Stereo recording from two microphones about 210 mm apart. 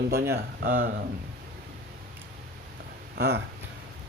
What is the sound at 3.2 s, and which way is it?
Speech, 50° right (ahead or behind).